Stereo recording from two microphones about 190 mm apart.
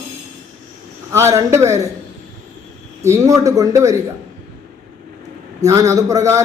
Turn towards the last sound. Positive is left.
turn(degrees=-15)  # may be behind; listen again after turning